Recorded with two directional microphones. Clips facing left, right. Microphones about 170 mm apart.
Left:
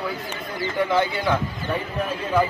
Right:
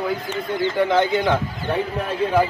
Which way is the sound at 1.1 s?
20° right (ahead or behind).